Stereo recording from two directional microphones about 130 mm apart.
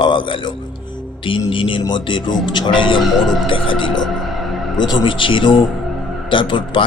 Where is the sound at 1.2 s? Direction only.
40° left (ahead or behind).